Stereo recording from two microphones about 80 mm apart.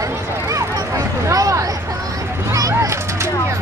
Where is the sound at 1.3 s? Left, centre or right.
Right.